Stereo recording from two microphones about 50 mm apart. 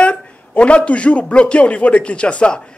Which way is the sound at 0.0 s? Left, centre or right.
Left.